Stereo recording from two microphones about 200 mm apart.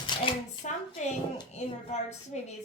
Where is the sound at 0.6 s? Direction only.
35° left (ahead or behind).